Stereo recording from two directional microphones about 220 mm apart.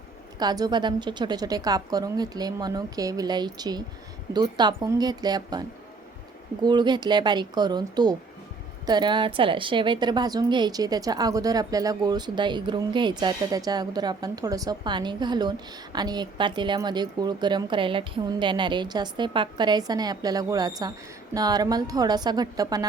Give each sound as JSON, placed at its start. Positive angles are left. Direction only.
{"t": 0.3, "sound": "a woman's voice", "side_deg": -20}